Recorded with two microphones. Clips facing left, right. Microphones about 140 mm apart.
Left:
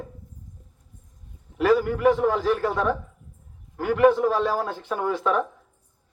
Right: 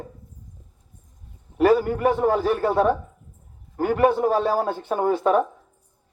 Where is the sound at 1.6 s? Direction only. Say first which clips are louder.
Right 2 dB; 45° right (ahead or behind).